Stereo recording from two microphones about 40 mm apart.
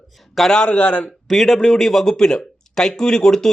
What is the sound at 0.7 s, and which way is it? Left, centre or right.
Speech, left.